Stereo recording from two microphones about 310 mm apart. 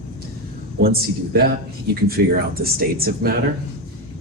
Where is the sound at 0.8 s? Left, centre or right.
Right.